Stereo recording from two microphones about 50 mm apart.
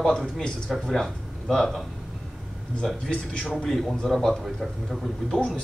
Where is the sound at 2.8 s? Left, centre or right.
Centre.